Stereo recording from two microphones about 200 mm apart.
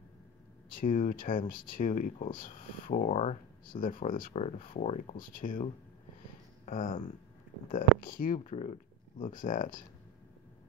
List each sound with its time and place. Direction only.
0.7 s speech: 40° left (ahead or behind)